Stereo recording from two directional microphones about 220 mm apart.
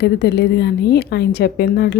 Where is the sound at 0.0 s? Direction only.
50° left (ahead or behind).